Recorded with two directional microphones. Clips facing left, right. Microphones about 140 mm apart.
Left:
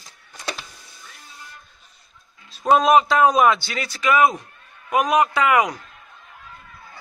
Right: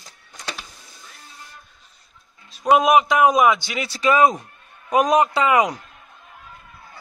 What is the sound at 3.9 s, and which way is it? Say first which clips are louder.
A man's voice: right 1 dB; 35° right (ahead or behind).